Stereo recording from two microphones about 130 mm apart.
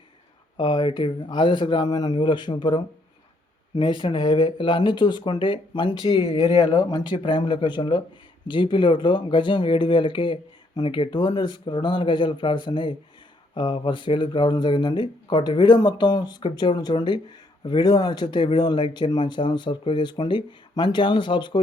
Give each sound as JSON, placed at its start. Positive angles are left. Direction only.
{"t": 0.5, "sound": "speech", "side_deg": 35}